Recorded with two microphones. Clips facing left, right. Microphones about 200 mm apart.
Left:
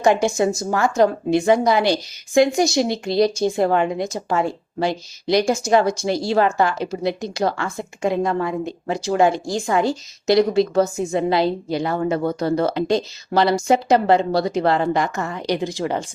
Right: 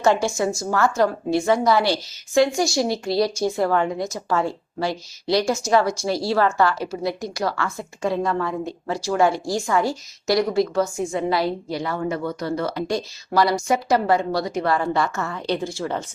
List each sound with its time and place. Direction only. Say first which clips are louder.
0.0 s a woman's voice: left 3 dB; 15° left (ahead or behind)